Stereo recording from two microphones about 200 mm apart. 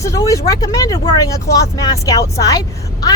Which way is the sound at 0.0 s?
15° left (ahead or behind).